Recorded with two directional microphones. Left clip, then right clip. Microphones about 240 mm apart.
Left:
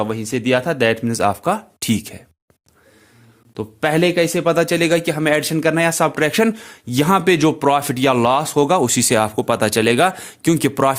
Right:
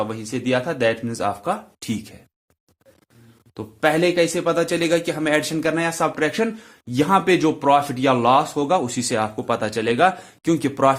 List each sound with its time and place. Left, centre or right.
0.0 s speech: left
3.5 s a man's voice: left